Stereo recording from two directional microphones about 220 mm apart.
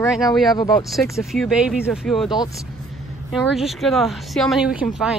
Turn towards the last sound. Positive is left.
turn(degrees=0)  # may be behind; listen again after turning